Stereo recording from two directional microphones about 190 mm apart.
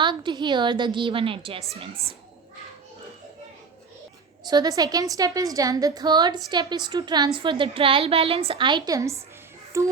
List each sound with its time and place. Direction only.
0.0 s a woman's voice: 25° right (ahead or behind)
4.4 s a woman's voice: 20° right (ahead or behind)